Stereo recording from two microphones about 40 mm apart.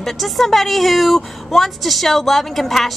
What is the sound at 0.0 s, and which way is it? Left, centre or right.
A woman's voice, centre.